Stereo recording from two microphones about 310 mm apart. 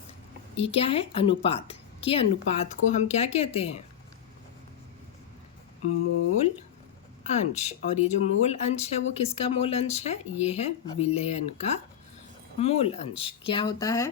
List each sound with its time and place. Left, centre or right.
0.6 s a woman's voice: centre
7.3 s a woman's voice: left